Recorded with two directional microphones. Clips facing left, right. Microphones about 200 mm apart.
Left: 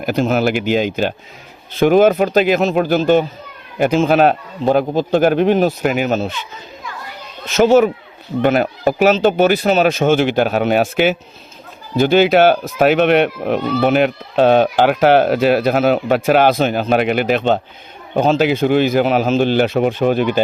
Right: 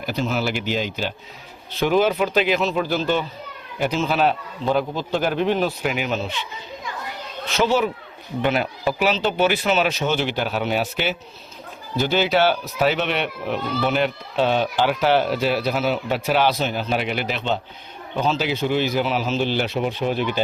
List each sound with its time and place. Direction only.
0.0 s speech: 55° left (ahead or behind)
1.7 s speech: 50° left (ahead or behind)
7.4 s speech: 45° left (ahead or behind)